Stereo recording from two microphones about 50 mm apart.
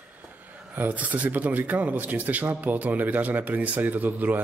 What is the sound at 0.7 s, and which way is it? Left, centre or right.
Speech, right.